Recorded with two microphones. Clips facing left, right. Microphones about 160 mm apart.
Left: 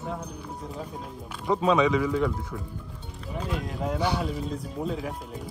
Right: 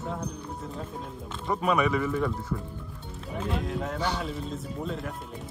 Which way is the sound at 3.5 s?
Centre (ahead or behind).